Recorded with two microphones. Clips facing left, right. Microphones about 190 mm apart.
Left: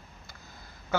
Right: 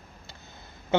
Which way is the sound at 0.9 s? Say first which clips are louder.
Right 5 dB; 25° right (ahead or behind).